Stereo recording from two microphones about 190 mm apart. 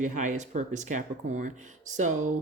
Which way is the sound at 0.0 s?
40° right (ahead or behind).